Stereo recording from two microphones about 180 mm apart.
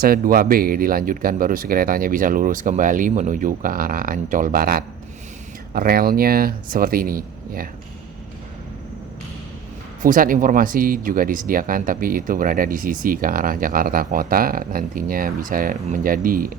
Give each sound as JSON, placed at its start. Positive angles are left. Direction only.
{"t": 0.0, "sound": "speech", "side_deg": -55}
{"t": 10.0, "sound": "speech", "side_deg": -50}